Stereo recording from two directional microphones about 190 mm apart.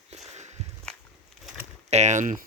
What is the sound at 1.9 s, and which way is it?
Speech, 35° right (ahead or behind).